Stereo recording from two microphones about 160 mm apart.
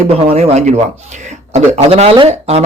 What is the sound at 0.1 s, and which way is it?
Speech, 40° right (ahead or behind).